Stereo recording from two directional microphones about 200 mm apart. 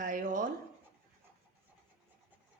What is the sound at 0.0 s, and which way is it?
Writing, 40° right (ahead or behind).